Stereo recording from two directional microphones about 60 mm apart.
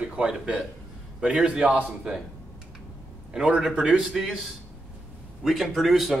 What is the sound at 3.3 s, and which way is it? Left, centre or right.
Speech, centre.